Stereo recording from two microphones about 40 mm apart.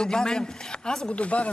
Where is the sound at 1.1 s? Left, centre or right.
Left.